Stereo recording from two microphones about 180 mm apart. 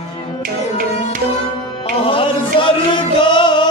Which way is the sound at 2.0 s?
30° left (ahead or behind).